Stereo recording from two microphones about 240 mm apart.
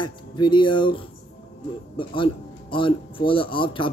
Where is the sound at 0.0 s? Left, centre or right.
Centre.